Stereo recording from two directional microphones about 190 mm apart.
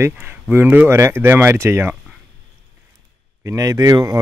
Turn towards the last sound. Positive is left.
turn(degrees=-20)  # may be behind; listen again after turning